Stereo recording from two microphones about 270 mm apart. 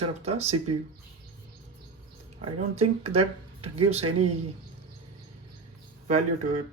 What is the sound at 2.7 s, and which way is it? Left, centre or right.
Speech, right.